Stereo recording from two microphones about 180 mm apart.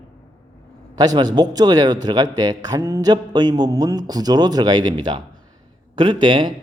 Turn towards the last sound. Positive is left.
turn(degrees=-25)  # may be behind; listen again after turning